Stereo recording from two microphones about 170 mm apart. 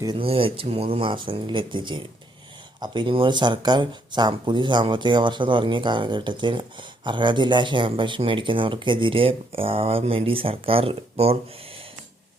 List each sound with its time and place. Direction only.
0.0 s speech: 30° right (ahead or behind)